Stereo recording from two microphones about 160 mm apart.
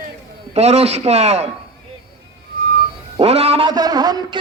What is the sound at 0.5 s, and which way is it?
Speech, 40° right (ahead or behind).